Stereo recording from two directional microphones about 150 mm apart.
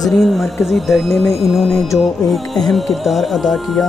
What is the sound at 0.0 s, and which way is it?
Speech, centre (ahead or behind).